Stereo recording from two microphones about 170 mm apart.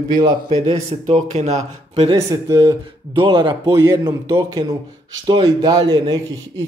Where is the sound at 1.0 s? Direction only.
40° right (ahead or behind).